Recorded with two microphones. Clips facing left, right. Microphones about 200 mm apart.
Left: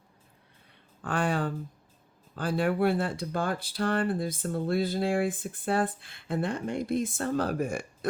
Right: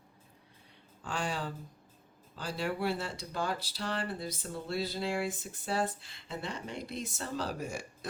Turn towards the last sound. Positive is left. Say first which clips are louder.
# left 8 dB
turn(degrees=55)  # may be behind; listen again after turning